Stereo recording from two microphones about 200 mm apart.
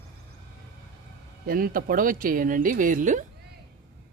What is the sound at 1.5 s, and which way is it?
Speech, 45° right (ahead or behind).